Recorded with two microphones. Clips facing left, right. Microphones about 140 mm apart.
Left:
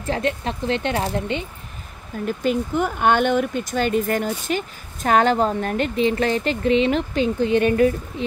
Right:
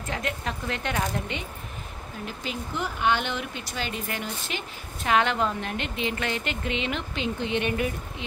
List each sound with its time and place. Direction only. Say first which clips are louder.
0.0 s speech: left 8 dB; 30° left (ahead or behind)
2.2 s speech: left 13 dB; 50° left (ahead or behind)